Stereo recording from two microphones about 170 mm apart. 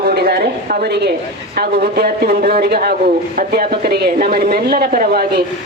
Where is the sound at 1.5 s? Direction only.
65° right (ahead or behind).